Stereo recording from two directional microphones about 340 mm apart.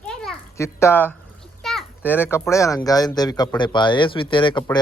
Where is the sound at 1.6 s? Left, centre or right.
Centre.